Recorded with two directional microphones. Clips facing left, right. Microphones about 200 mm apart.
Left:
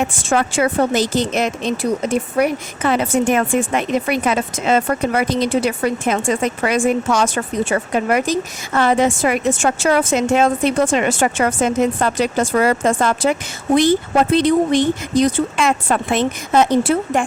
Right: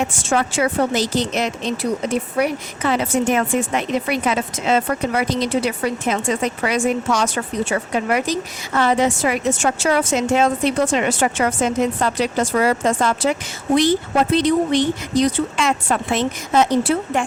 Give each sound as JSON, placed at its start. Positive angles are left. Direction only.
{"t": 0.3, "sound": "speech", "side_deg": 55}
{"t": 14.3, "sound": "speech", "side_deg": 50}